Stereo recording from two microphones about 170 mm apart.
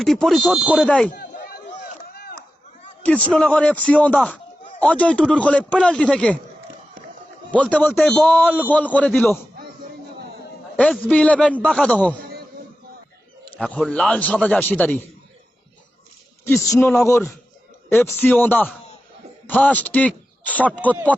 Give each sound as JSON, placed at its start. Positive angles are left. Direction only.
{"t": 0.0, "sound": "speech", "side_deg": 0}
{"t": 0.9, "sound": "speech", "side_deg": 5}
{"t": 1.1, "sound": "chop", "side_deg": 50}
{"t": 3.0, "sound": "a man's voice", "side_deg": 10}
{"t": 7.5, "sound": "a man's voice", "side_deg": 10}
{"t": 10.8, "sound": "a man's voice", "side_deg": 5}
{"t": 13.6, "sound": "a man's voice", "side_deg": 5}
{"t": 16.6, "sound": "a man's voice", "side_deg": 15}